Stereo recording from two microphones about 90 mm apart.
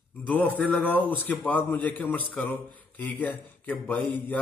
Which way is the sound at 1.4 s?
20° left (ahead or behind).